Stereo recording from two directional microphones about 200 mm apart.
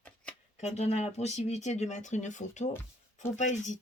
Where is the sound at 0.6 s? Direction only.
35° left (ahead or behind).